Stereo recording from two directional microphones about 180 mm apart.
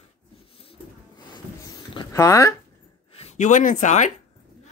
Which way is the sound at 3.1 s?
35° left (ahead or behind).